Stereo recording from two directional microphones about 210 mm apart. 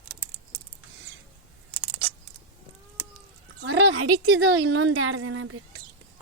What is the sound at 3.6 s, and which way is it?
A woman's voice, 60° right (ahead or behind).